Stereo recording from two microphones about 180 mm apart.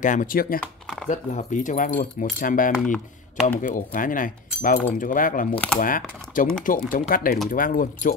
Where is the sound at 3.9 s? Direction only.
50° left (ahead or behind).